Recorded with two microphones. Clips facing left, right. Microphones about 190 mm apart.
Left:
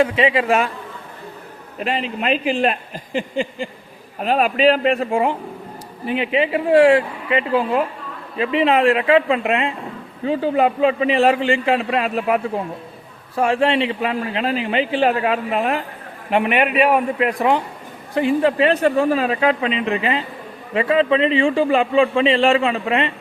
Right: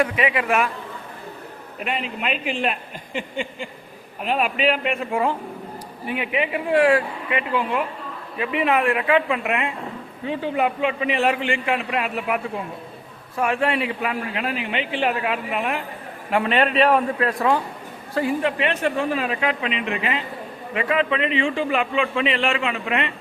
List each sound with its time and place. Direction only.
0.0 s a woman's voice: 25° left (ahead or behind)
1.8 s a man's voice: 30° left (ahead or behind)
16.3 s a man's voice: 15° left (ahead or behind)
18.4 s a man's voice: 35° left (ahead or behind)